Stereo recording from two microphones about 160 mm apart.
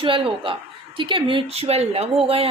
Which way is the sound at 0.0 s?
35° right (ahead or behind).